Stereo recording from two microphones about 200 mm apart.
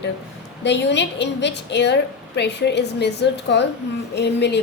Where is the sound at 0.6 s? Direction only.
60° left (ahead or behind).